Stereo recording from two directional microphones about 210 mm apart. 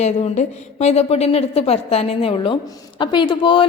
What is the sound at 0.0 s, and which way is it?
A woman's voice, 30° left (ahead or behind).